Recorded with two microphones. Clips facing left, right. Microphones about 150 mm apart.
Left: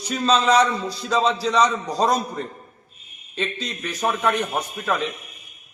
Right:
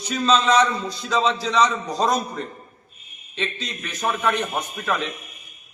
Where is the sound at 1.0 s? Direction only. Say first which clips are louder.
Left 1 dB; 5° left (ahead or behind).